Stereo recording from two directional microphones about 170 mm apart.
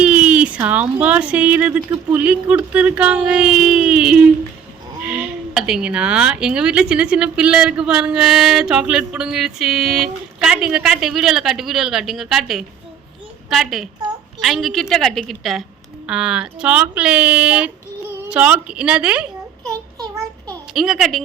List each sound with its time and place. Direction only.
0.0 s speech: 5° right (ahead or behind)
19.6 s child singing: 20° right (ahead or behind)
20.7 s speech: centre (ahead or behind)